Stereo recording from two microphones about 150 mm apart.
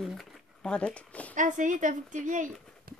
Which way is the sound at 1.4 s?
60° right (ahead or behind).